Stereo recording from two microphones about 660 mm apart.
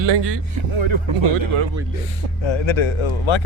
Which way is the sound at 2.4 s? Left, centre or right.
Left.